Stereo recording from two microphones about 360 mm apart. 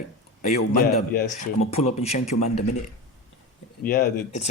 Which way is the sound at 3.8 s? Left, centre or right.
Left.